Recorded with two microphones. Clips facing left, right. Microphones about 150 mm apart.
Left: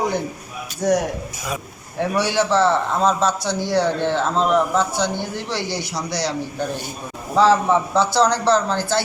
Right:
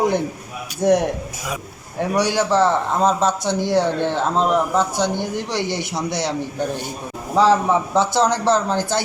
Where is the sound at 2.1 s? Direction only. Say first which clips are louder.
Right 1 dB; 15° right (ahead or behind).